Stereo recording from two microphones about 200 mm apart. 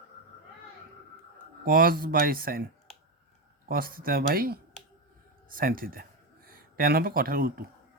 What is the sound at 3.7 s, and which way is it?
Speech, 45° right (ahead or behind).